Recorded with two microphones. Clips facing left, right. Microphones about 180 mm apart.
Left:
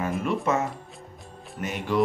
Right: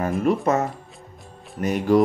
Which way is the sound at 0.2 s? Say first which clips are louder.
Right 6 dB; 40° right (ahead or behind).